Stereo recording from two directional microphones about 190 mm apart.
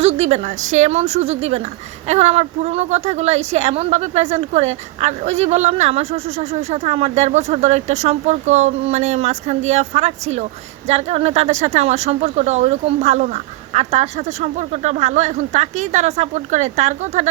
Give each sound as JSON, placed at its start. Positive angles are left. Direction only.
{"t": 0.0, "sound": "a woman's voice", "side_deg": -35}